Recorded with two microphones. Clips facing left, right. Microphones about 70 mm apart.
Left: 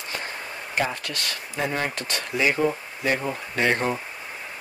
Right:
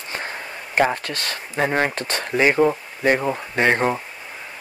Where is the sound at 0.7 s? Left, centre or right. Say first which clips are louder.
Right 7 dB; right.